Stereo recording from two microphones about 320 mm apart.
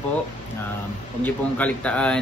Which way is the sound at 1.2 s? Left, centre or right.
Centre.